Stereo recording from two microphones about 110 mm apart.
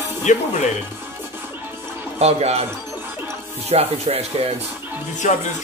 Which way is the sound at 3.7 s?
70° right (ahead or behind).